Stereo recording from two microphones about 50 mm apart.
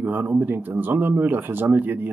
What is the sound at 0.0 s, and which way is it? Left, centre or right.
Speech, right.